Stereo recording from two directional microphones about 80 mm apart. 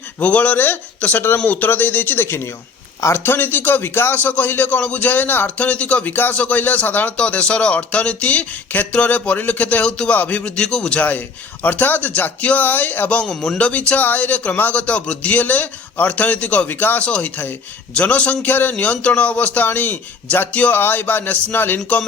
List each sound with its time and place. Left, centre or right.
0.2 s a man's voice: centre
13.2 s a man's voice: centre; by 22.0 s left